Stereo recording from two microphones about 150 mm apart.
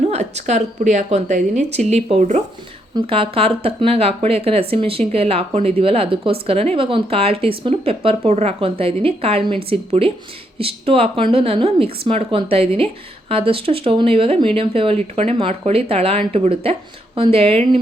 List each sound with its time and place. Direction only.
0.0 s a woman's voice: 45° right (ahead or behind)
2.9 s a woman's voice: 35° right (ahead or behind)